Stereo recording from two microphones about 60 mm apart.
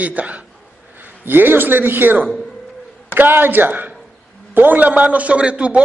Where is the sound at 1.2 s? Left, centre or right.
Right.